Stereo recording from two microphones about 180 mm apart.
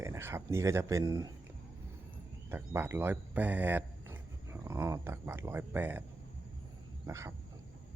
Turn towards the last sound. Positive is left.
turn(degrees=-15)  # may be behind; listen again after turning